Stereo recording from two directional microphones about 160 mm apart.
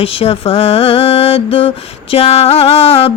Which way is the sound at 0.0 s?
35° left (ahead or behind).